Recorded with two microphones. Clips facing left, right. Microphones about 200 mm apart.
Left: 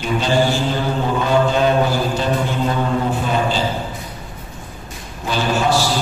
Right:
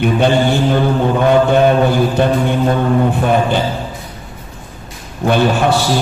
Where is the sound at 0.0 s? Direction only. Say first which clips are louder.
Right 5 dB; 60° right (ahead or behind).